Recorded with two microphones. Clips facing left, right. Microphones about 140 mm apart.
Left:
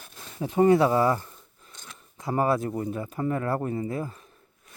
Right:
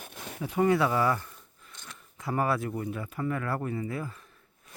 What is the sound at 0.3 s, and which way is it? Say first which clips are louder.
Speech: left 5 dB; 30° left (ahead or behind).